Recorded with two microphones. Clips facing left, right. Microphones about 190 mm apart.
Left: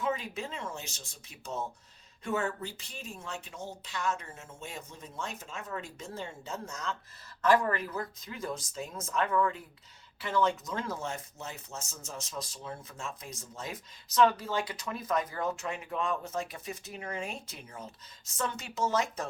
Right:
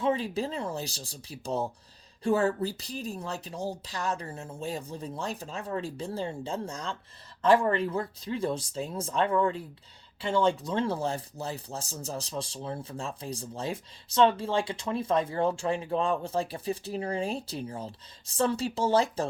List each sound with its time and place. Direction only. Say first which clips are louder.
0.0 s speech: right 6 dB; 30° right (ahead or behind)